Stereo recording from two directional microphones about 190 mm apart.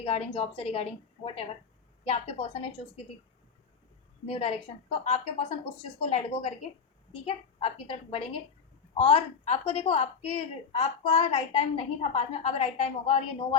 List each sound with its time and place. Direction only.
0.0 s a woman's voice: 30° left (ahead or behind)
4.3 s a woman's voice: 30° left (ahead or behind)